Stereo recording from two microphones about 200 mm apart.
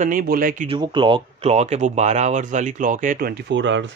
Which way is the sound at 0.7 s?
25° right (ahead or behind).